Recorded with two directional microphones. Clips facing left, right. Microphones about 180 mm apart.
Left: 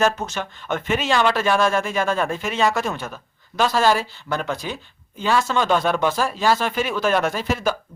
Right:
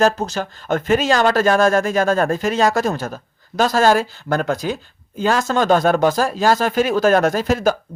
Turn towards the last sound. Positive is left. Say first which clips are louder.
# right 5 dB
turn(degrees=-45)  # may be behind; listen again after turning